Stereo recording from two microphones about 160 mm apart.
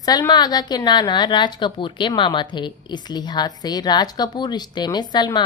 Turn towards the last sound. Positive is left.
turn(degrees=25)  # may be behind; listen again after turning